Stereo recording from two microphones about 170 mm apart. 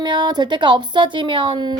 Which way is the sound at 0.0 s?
25° right (ahead or behind).